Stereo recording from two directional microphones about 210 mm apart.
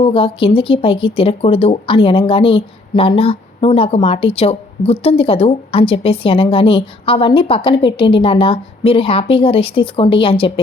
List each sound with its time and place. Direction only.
0.0 s speech: 25° left (ahead or behind)